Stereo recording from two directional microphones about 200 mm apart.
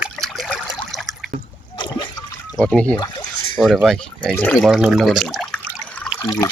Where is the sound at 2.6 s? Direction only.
5° left (ahead or behind).